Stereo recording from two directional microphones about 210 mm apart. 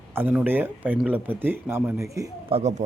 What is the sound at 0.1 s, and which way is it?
Speech, 10° right (ahead or behind).